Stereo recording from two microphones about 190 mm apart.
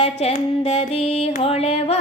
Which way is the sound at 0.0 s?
35° left (ahead or behind).